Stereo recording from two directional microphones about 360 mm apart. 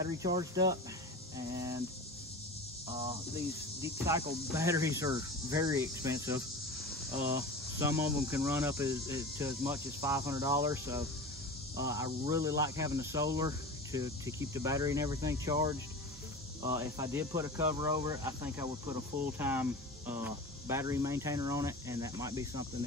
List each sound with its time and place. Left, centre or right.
0.0 s speech: centre
2.9 s speech: centre